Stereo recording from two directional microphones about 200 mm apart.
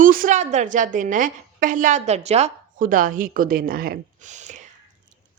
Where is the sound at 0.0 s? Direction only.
45° right (ahead or behind).